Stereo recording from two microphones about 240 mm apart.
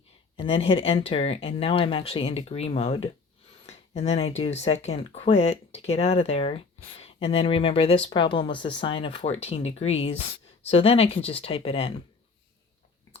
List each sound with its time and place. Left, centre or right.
0.3 s speech: left